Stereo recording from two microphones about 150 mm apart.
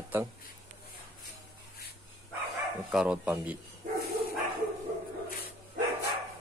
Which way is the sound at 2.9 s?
5° right (ahead or behind).